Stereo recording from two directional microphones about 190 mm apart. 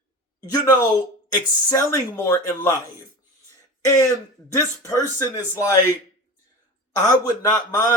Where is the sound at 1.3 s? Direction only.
15° left (ahead or behind).